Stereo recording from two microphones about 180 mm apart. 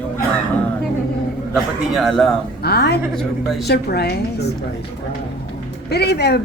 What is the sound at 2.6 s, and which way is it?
Speech, 65° left (ahead or behind).